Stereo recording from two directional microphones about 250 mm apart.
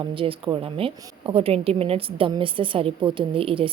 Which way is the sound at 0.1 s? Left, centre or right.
Right.